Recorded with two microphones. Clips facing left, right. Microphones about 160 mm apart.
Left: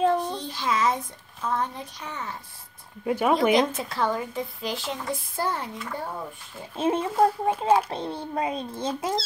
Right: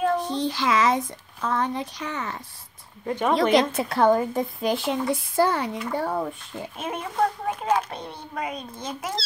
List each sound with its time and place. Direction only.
0.4 s speech: 90° right
3.1 s speech: 10° left (ahead or behind)
3.5 s speech: 60° right (ahead or behind); by 6.2 s 80° right
6.8 s a child's voice: 25° left (ahead or behind)
7.5 s speech: 10° left (ahead or behind)
7.9 s a child's voice: 30° left (ahead or behind)